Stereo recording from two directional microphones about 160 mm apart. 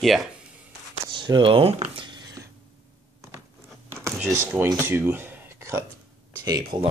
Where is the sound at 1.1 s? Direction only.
30° right (ahead or behind).